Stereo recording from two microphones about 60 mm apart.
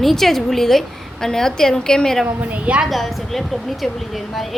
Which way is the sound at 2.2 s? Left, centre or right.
Right.